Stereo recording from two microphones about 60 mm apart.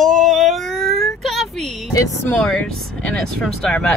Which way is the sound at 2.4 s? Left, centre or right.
Centre.